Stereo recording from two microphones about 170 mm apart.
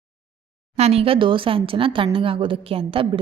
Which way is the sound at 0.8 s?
35° right (ahead or behind).